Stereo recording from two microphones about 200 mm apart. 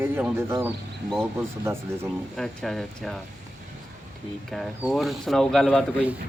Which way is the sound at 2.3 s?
Centre (ahead or behind).